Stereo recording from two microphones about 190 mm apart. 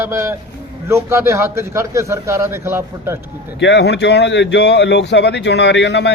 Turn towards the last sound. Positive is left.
turn(degrees=65)  # may be behind; listen again after turning